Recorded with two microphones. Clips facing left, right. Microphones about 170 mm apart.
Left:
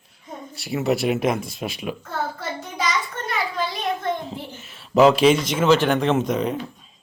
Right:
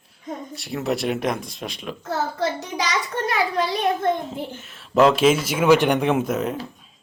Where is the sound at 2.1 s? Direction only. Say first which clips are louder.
Right 8 dB; 80° right.